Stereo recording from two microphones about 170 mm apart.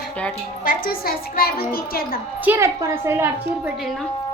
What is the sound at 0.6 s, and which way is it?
A child's voice, 55° left (ahead or behind).